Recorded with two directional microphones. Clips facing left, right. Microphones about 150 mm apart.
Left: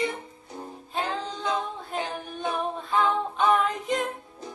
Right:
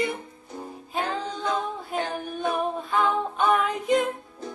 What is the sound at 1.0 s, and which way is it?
Music, 20° left (ahead or behind).